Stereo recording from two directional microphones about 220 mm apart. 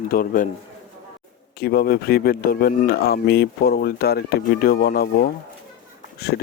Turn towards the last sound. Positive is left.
turn(degrees=45)  # may be behind; listen again after turning